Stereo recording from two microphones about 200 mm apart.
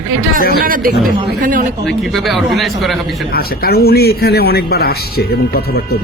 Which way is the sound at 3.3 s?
50° left (ahead or behind).